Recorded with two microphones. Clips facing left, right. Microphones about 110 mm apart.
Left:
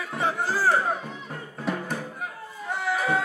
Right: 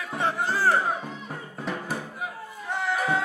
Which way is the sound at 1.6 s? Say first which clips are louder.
Left 2 dB; centre (ahead or behind).